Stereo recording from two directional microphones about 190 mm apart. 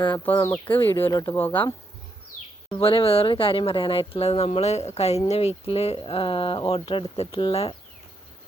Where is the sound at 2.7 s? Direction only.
30° left (ahead or behind).